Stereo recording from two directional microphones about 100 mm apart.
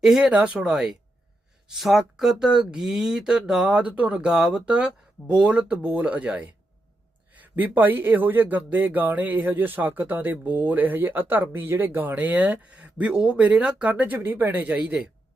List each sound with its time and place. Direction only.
0.0 s speech: 5° right (ahead or behind)